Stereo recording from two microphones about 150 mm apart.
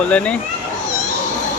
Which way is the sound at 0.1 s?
10° left (ahead or behind).